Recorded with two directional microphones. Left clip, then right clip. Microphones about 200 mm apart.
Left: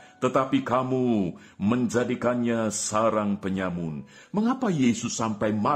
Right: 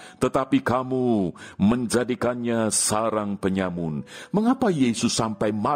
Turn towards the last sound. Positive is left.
turn(degrees=-50)  # may be behind; listen again after turning